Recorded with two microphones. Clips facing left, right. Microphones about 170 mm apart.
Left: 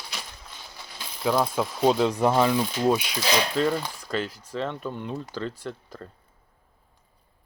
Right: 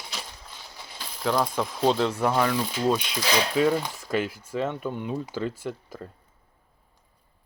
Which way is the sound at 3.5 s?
10° right (ahead or behind).